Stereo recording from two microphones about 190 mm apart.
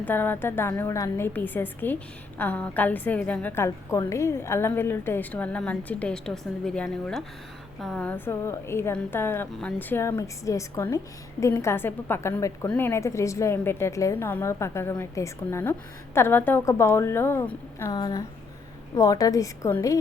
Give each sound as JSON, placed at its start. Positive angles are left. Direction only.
{"t": 0.0, "sound": "a woman's voice", "side_deg": 10}